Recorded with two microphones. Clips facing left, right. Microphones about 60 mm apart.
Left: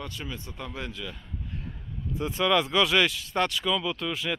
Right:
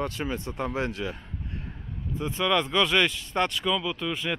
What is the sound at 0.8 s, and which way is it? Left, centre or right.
Speech, right.